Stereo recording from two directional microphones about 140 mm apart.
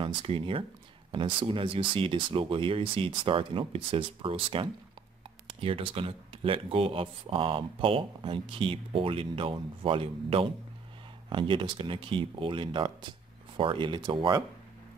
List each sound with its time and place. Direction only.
0.0 s speech: 40° right (ahead or behind)